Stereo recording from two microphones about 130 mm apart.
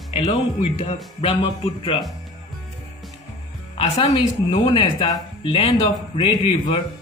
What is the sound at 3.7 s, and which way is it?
A woman's voice, 45° left (ahead or behind).